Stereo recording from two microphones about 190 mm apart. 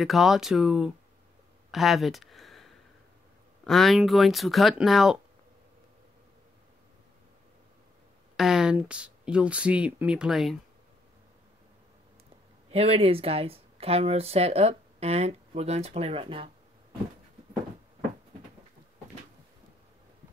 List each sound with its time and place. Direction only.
0.0 s speech: centre (ahead or behind)
1.7 s a sound: centre (ahead or behind)
3.6 s speech: centre (ahead or behind)
8.4 s speech: 5° right (ahead or behind)
12.7 s speech: 30° right (ahead or behind)